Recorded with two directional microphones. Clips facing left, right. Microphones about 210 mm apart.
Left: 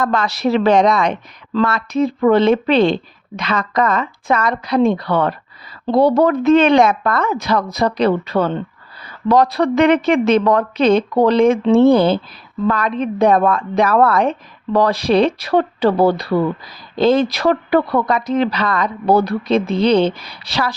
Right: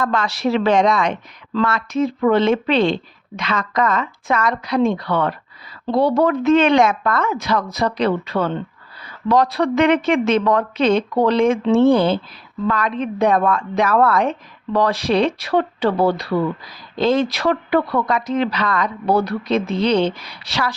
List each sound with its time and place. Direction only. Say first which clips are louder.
0.0 s speech: left 2 dB; 40° left (ahead or behind)